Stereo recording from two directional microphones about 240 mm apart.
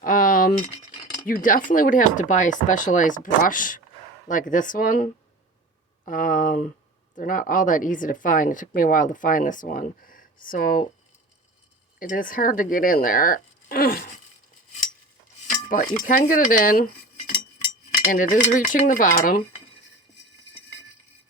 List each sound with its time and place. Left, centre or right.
0.0 s a sound: left
1.2 s speech: left
6.1 s speech: left
11.9 s speech: left
15.7 s speech: left